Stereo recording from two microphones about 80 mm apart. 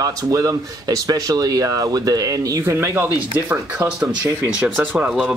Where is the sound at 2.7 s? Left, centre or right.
Right; by 5.3 s centre.